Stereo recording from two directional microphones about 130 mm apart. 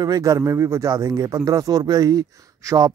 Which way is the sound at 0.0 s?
25° right (ahead or behind).